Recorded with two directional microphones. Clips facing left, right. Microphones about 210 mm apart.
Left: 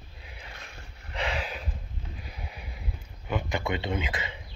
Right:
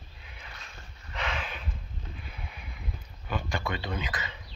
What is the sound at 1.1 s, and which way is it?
Snort, 30° left (ahead or behind).